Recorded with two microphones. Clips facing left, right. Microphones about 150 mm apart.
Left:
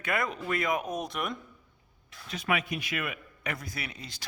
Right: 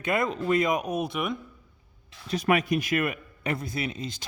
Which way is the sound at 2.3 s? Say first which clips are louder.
Right 7 dB; 40° right (ahead or behind).